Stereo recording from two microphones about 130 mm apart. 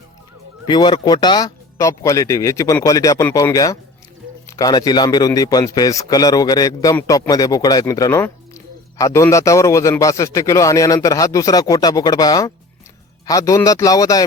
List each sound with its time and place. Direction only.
0.7 s speech: 35° left (ahead or behind)